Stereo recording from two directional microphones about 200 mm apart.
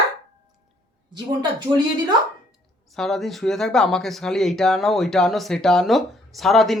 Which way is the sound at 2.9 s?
Centre (ahead or behind).